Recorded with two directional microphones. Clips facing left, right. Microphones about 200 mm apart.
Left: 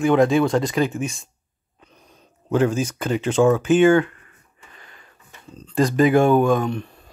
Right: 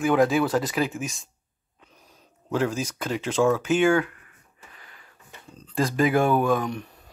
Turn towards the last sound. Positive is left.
turn(degrees=-15)  # may be behind; listen again after turning